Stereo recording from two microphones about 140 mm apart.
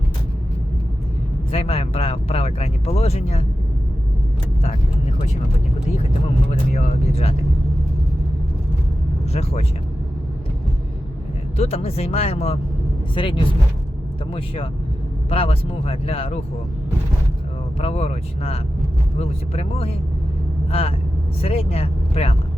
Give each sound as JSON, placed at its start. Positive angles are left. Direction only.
{"t": 1.5, "sound": "speech", "side_deg": 45}
{"t": 6.5, "sound": "speech", "side_deg": 50}
{"t": 9.3, "sound": "speech", "side_deg": 50}
{"t": 11.5, "sound": "speech", "side_deg": 50}
{"t": 13.1, "sound": "speech", "side_deg": 35}
{"t": 17.7, "sound": "speech", "side_deg": 45}